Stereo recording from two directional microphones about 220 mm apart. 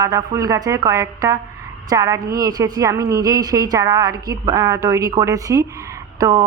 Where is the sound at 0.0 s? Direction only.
15° right (ahead or behind).